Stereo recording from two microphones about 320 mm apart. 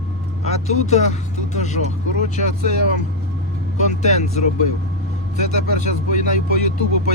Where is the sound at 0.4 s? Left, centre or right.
Left.